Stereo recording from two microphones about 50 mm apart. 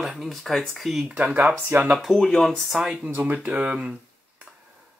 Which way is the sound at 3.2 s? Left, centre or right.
Right.